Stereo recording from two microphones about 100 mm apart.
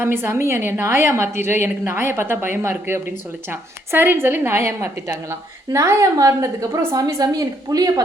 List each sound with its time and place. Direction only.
0.0 s a woman's voice: 25° right (ahead or behind); by 8.0 s 40° right (ahead or behind)